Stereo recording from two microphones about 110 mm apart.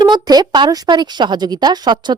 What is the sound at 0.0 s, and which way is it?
Speech, 40° right (ahead or behind).